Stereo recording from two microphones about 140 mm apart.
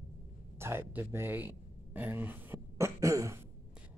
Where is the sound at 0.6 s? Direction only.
15° right (ahead or behind).